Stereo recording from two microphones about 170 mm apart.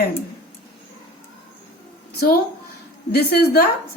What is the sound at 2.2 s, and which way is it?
A woman's voice, 60° left (ahead or behind).